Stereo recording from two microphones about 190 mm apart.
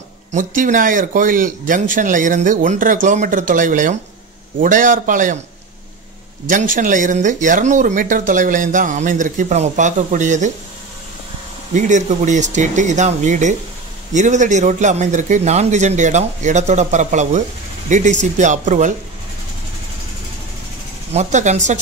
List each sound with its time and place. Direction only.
0.3 s speech: 40° right (ahead or behind)
6.5 s speech: 45° right (ahead or behind)
11.7 s speech: 40° right (ahead or behind)
21.1 s speech: 35° right (ahead or behind)